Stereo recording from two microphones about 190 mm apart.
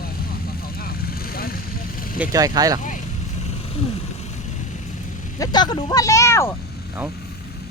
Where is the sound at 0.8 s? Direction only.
50° left (ahead or behind).